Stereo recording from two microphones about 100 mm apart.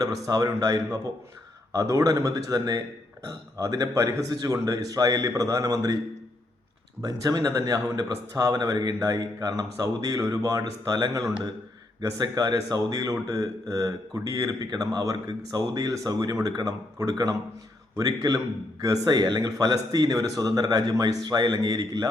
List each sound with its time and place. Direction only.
0.3 s speech: 35° right (ahead or behind)
7.0 s speech: 40° right (ahead or behind)